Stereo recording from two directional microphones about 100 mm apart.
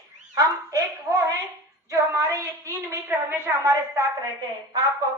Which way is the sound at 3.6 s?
35° right (ahead or behind).